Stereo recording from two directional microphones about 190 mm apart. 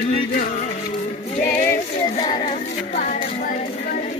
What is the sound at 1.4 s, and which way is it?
Music, 10° left (ahead or behind).